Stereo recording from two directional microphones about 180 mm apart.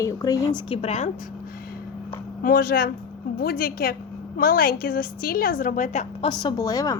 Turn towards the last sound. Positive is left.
turn(degrees=20)  # may be behind; listen again after turning